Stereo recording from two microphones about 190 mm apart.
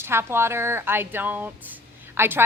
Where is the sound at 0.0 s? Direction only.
15° right (ahead or behind).